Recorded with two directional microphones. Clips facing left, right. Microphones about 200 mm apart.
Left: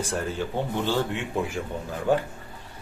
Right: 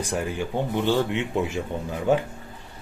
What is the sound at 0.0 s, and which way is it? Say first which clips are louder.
Speech: right 1 dB; 15° right (ahead or behind).